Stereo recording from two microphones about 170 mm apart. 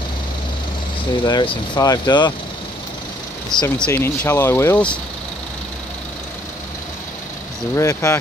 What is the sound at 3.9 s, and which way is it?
Speech, 15° left (ahead or behind).